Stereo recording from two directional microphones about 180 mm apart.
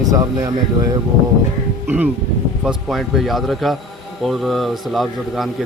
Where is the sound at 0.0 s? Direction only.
20° right (ahead or behind).